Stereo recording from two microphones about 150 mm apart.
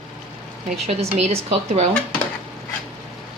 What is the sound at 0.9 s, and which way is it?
A woman's voice, 45° right (ahead or behind).